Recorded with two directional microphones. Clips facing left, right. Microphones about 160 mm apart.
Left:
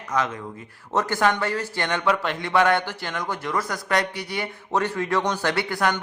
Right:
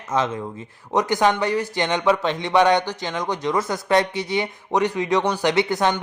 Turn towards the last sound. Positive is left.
turn(degrees=-20)  # may be behind; listen again after turning